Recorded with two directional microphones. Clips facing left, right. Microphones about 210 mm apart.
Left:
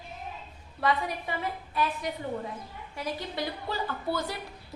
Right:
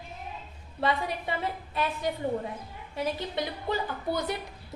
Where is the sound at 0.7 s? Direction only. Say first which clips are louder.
Even; 25° right (ahead or behind).